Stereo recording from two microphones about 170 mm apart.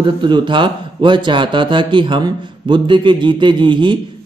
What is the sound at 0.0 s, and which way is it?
Speech, 30° right (ahead or behind).